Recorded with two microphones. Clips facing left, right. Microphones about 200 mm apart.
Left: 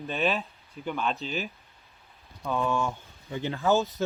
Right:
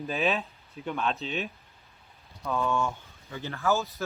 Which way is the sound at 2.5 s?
Centre (ahead or behind).